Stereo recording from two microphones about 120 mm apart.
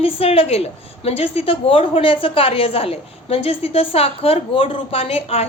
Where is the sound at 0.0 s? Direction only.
55° left (ahead or behind).